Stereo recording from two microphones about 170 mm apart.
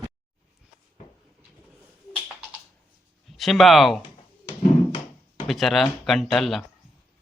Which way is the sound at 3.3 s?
Centre (ahead or behind).